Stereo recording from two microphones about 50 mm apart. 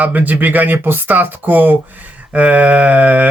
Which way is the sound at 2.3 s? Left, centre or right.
Right.